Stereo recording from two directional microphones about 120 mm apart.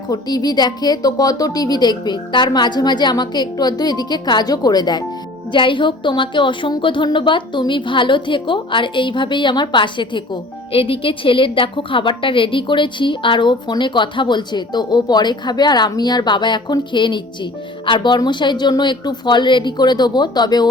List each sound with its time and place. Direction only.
0.1 s a woman's voice: 35° left (ahead or behind)